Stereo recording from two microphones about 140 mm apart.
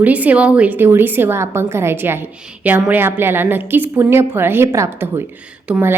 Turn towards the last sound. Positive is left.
turn(degrees=-15)  # may be behind; listen again after turning